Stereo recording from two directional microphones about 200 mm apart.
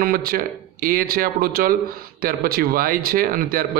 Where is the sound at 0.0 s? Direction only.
45° right (ahead or behind).